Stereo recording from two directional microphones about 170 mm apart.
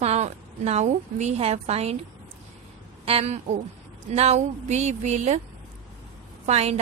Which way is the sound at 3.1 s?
35° right (ahead or behind).